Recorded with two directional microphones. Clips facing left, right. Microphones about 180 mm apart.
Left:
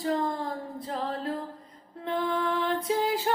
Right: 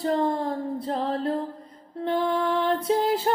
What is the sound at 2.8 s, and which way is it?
Music, 35° right (ahead or behind).